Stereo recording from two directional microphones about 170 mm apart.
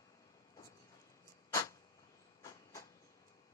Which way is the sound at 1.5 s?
20° left (ahead or behind).